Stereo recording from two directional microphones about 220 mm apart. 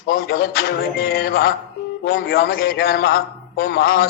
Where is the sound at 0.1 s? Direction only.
45° left (ahead or behind).